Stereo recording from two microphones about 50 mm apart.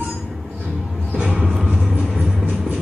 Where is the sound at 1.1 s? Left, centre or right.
Centre.